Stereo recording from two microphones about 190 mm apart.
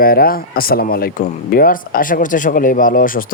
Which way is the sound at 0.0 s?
50° left (ahead or behind).